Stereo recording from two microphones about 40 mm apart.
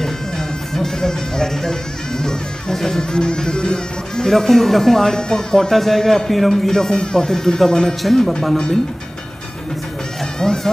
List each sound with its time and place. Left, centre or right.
0.7 s speech: centre
4.3 s a man's voice: centre
10.4 s a man's voice: centre